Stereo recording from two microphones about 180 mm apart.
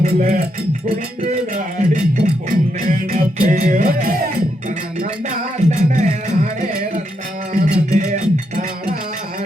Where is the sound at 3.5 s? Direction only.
45° right (ahead or behind).